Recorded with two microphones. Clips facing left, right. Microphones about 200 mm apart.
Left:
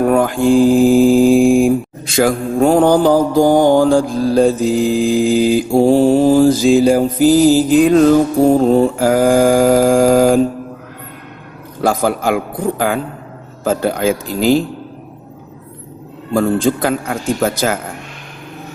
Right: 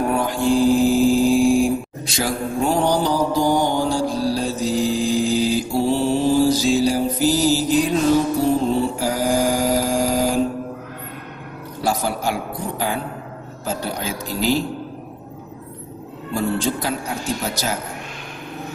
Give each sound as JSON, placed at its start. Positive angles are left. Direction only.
{"t": 0.0, "sound": "mantra", "side_deg": 50}
{"t": 0.5, "sound": "mantra", "side_deg": 15}
{"t": 1.1, "sound": "mantra", "side_deg": 55}
{"t": 11.8, "sound": "a man's voice", "side_deg": 55}
{"t": 16.3, "sound": "a man's voice", "side_deg": 50}